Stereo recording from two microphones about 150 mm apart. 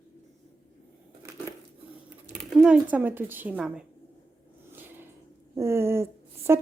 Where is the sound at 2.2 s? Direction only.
5° right (ahead or behind).